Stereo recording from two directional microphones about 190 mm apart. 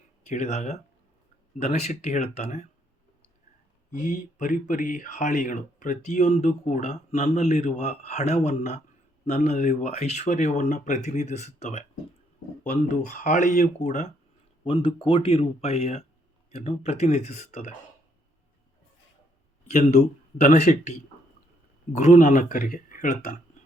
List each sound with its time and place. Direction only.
0.3 s speech: 35° left (ahead or behind)
3.9 s speech: 40° left (ahead or behind)
14.6 s speech: 30° left (ahead or behind)
19.7 s speech: 35° left (ahead or behind)
21.9 s speech: 45° left (ahead or behind)